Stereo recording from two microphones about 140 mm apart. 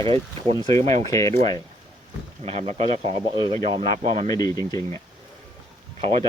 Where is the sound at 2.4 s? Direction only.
50° right (ahead or behind).